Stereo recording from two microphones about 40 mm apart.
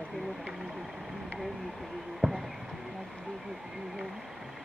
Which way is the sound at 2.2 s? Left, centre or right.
Centre.